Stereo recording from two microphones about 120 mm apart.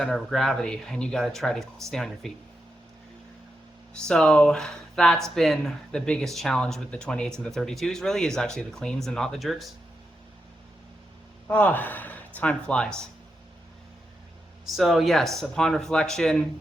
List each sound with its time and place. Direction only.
0.0 s speech: 5° left (ahead or behind)
4.0 s speech: 5° left (ahead or behind)
11.4 s speech: 15° left (ahead or behind)
14.7 s speech: centre (ahead or behind)